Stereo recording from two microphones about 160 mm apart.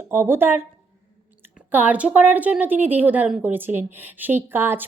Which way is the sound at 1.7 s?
10° right (ahead or behind).